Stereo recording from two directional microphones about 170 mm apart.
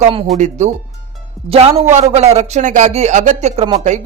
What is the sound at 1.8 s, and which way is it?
Speech, 40° right (ahead or behind).